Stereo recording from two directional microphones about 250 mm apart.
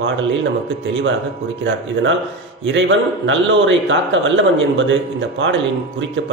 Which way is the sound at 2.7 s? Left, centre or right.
Right.